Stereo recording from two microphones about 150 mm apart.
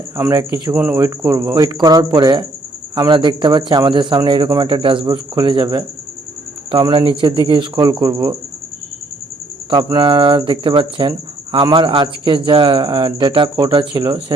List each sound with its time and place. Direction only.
0.2 s a man's voice: 20° right (ahead or behind)
9.6 s a man's voice: 30° right (ahead or behind)